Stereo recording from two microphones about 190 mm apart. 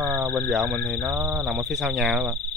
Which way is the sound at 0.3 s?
5° left (ahead or behind).